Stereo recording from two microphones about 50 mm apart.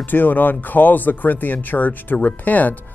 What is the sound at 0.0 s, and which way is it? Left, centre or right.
A man's voice, left.